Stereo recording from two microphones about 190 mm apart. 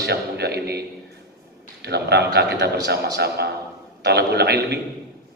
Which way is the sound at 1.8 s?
60° right (ahead or behind).